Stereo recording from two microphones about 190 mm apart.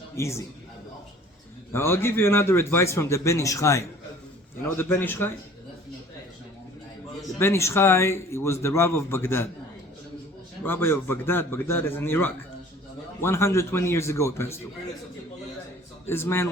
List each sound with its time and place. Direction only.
0.2 s a man's voice: 15° left (ahead or behind)
1.7 s a man's voice: 10° left (ahead or behind)
7.3 s a man's voice: 15° left (ahead or behind)
10.6 s a man's voice: 10° left (ahead or behind)
16.0 s a man's voice: 10° left (ahead or behind)